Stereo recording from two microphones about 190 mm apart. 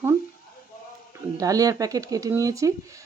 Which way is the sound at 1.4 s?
20° right (ahead or behind).